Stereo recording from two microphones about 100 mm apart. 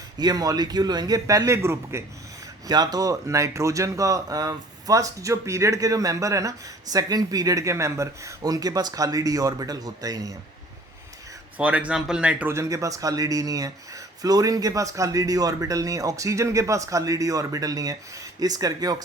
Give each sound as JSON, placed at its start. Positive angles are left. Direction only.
{"t": 0.2, "sound": "speech", "side_deg": -40}
{"t": 2.6, "sound": "speech", "side_deg": -40}
{"t": 11.5, "sound": "speech", "side_deg": -15}
{"t": 12.5, "sound": "speech", "side_deg": -30}